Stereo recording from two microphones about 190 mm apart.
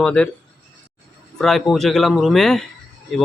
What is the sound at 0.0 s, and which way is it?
Speech, 5° left (ahead or behind).